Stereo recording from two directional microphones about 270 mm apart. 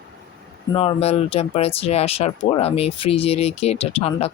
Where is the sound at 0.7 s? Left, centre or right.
Centre.